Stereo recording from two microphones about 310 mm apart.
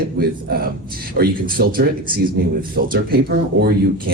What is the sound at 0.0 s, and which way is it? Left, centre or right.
Speech, right.